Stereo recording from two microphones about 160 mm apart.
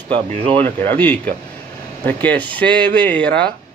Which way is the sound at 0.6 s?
10° left (ahead or behind).